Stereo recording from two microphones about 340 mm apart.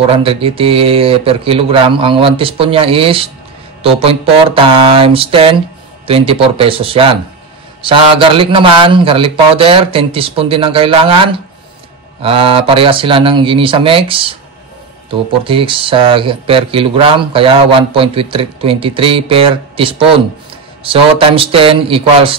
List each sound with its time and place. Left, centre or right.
0.0 s speech: centre